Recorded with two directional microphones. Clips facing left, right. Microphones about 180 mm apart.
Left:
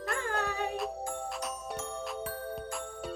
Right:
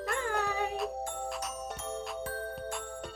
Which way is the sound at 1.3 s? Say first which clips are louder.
Even; centre (ahead or behind).